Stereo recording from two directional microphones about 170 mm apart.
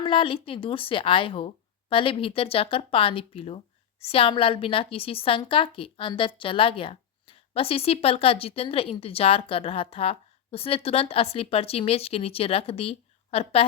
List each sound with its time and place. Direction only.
0.0 s a woman's voice: 30° left (ahead or behind)